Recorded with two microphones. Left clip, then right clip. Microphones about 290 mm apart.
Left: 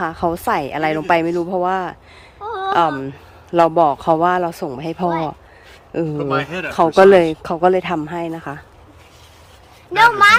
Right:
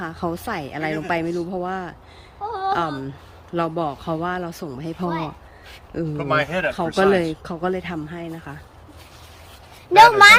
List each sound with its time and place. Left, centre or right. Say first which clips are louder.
0.0 s speech: left 8 dB; centre
6.1 s speech: right 3 dB; centre
6.9 s speech: left 9 dB; centre
9.9 s speech: right 2 dB; right